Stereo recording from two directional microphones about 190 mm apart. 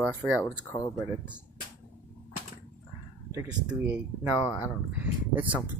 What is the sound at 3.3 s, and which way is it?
Speech, 15° right (ahead or behind).